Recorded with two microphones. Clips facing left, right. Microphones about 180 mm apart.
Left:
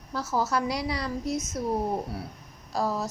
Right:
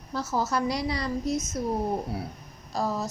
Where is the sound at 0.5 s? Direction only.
5° left (ahead or behind).